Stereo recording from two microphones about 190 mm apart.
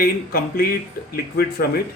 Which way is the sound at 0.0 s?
50° left (ahead or behind).